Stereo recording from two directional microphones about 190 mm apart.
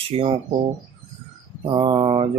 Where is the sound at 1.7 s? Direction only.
25° right (ahead or behind).